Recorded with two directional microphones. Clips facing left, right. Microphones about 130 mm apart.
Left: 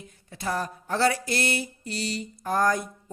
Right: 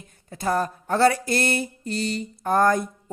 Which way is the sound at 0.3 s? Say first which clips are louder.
Right 6 dB; 50° right (ahead or behind).